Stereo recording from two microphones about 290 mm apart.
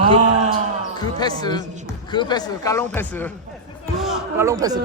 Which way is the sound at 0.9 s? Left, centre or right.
Centre.